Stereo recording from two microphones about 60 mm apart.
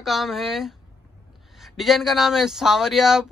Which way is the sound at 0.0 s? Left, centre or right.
Centre.